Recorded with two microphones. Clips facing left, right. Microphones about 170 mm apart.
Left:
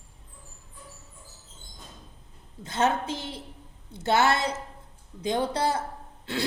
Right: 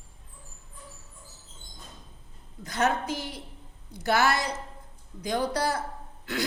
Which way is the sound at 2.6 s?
25° left (ahead or behind).